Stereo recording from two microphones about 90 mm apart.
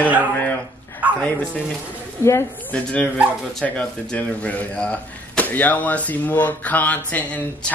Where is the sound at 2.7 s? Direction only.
15° left (ahead or behind).